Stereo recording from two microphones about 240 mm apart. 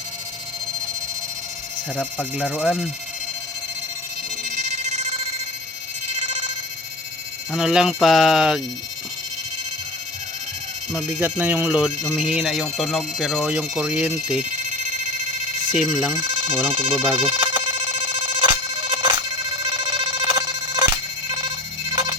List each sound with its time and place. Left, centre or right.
2.3 s speech: centre
7.5 s speech: centre
10.9 s speech: centre
15.7 s speech: centre
16.6 s speech: right
17.2 s telephone: right